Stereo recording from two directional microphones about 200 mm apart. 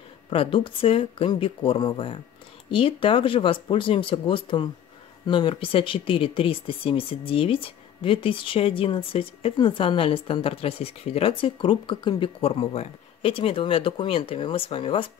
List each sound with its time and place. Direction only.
0.3 s speech: 25° left (ahead or behind)